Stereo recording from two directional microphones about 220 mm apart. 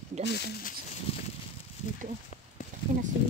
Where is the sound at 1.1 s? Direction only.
25° left (ahead or behind).